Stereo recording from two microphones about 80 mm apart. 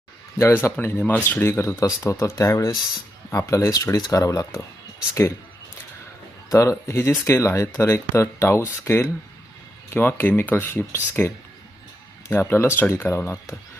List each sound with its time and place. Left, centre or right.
0.3 s speech: left
6.5 s speech: left
12.3 s speech: left